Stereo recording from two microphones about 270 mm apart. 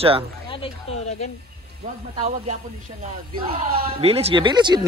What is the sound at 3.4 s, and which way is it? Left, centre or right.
Speech, right.